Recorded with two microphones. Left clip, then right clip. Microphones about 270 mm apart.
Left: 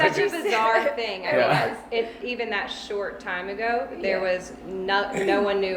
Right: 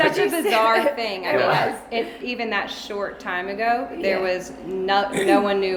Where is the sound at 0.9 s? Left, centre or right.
Right.